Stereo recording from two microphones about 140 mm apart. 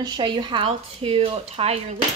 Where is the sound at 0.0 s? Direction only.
35° right (ahead or behind).